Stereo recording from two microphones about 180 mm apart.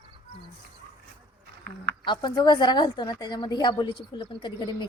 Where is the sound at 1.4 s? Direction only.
65° right (ahead or behind).